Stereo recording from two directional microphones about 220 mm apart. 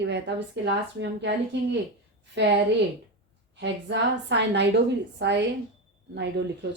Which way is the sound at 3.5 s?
50° right (ahead or behind).